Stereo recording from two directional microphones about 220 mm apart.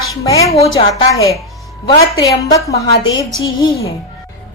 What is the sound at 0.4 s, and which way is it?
Speech, 30° left (ahead or behind).